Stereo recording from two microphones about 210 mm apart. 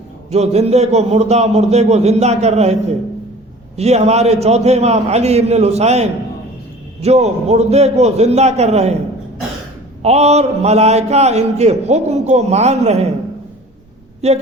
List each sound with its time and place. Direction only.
0.3 s a man's voice: 30° right (ahead or behind)
3.8 s a man's voice: 30° right (ahead or behind)
10.0 s a man's voice: 30° right (ahead or behind)
14.2 s speech: 30° right (ahead or behind)